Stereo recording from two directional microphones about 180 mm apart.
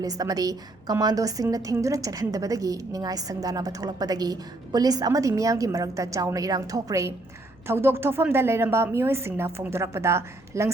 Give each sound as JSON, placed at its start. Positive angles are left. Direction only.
{"t": 0.0, "sound": "a woman's voice", "side_deg": -20}